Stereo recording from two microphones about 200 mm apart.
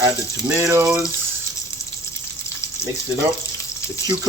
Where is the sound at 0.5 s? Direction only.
15° right (ahead or behind).